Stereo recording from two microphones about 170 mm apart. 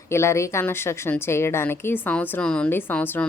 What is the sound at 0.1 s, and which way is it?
A woman's voice, 15° left (ahead or behind).